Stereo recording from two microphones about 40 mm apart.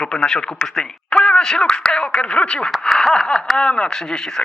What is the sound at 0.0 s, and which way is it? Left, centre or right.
Speech, left.